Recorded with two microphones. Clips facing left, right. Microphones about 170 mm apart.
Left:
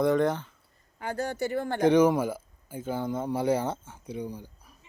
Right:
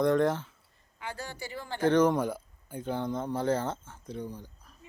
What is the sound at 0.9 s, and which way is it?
Speech, 45° left (ahead or behind).